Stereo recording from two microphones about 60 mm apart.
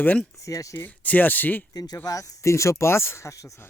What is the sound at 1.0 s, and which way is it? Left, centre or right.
Speech, left.